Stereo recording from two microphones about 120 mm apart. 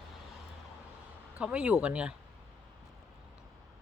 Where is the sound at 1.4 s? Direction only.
10° right (ahead or behind).